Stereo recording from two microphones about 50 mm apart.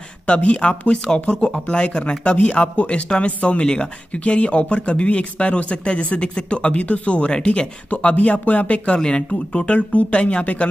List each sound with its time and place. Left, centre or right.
0.3 s speech: left